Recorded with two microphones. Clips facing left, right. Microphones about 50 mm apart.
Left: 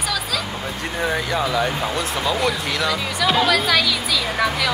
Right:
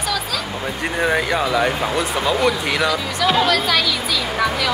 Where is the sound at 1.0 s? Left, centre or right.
Right.